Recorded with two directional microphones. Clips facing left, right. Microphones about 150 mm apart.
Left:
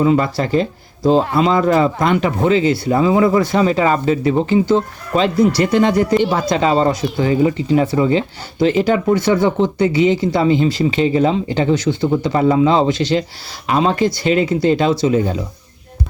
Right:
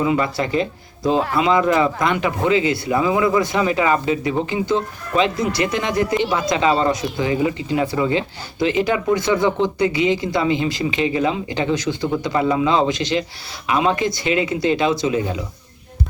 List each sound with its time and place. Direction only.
0.0 s speech: 35° left (ahead or behind)